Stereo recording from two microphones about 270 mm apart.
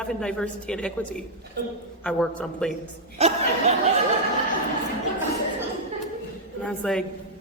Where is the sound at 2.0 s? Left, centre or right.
Centre.